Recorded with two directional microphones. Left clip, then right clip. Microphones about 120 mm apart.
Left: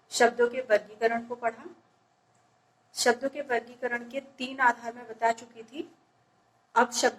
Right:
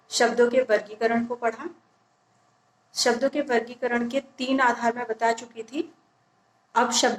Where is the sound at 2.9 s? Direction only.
25° right (ahead or behind).